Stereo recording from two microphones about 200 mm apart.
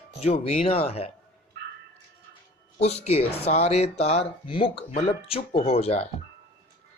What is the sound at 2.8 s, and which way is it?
Speech, 30° left (ahead or behind).